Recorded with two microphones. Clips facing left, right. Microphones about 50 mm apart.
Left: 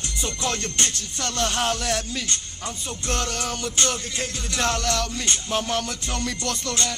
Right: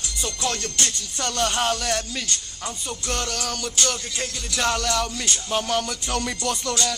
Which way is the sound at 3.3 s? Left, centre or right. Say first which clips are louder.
Even; left.